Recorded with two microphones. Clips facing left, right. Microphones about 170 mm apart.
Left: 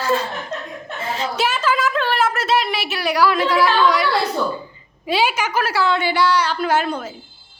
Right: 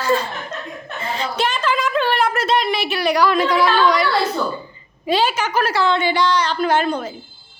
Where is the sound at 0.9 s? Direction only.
5° left (ahead or behind).